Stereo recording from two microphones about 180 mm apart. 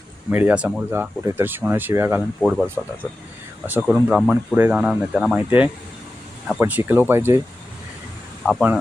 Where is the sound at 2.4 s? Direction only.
Centre (ahead or behind).